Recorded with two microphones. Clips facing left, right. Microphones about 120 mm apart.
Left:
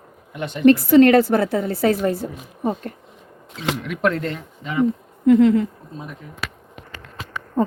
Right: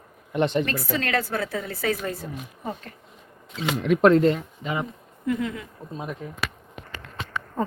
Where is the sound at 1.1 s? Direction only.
35° left (ahead or behind).